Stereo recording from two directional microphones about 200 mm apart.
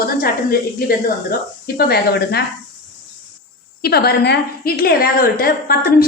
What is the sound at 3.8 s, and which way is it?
A woman's voice, 50° left (ahead or behind).